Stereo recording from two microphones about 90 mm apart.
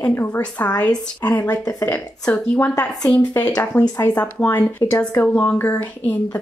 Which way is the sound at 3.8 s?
25° left (ahead or behind).